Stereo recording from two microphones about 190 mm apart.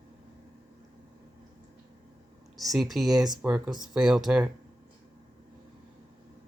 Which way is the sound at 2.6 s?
Centre (ahead or behind).